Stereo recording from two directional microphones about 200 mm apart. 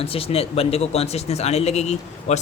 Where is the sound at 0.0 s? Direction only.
30° left (ahead or behind).